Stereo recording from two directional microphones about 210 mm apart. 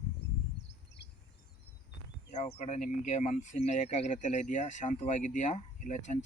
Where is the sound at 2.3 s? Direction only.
35° left (ahead or behind).